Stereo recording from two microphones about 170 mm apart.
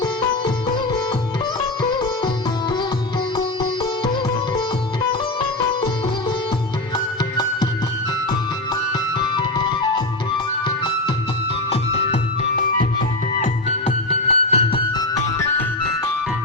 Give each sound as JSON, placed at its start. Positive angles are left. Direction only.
{"t": 1.8, "sound": "sitar", "side_deg": 25}
{"t": 3.3, "sound": "music", "side_deg": 30}
{"t": 6.9, "sound": "music", "side_deg": 25}
{"t": 9.3, "sound": "music", "side_deg": 25}
{"t": 10.7, "sound": "music", "side_deg": 25}
{"t": 11.7, "sound": "music", "side_deg": 40}